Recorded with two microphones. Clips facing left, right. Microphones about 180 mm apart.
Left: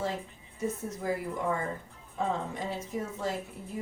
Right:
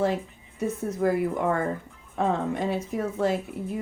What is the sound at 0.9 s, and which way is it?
A woman's voice, 65° right (ahead or behind).